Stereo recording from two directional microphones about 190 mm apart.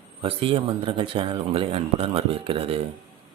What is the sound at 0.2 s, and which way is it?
Speech, 30° right (ahead or behind).